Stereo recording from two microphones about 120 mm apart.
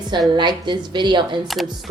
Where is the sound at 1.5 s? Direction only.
Centre (ahead or behind).